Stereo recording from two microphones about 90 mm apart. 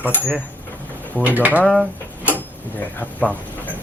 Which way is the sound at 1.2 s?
20° right (ahead or behind).